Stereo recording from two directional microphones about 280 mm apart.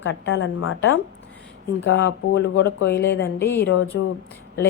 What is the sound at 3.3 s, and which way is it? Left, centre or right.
Speech, centre.